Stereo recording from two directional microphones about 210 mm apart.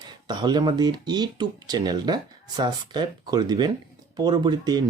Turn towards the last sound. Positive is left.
turn(degrees=-20)  # may be behind; listen again after turning